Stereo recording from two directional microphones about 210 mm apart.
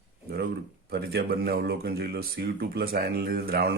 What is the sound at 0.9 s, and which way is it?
Speech, 45° right (ahead or behind).